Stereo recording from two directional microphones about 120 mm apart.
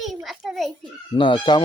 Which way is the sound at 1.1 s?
45° left (ahead or behind).